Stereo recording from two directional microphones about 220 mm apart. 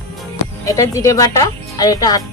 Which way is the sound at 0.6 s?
15° left (ahead or behind).